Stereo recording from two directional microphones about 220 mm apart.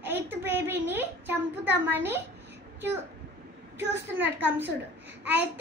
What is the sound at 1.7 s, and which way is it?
Speech, 10° right (ahead or behind).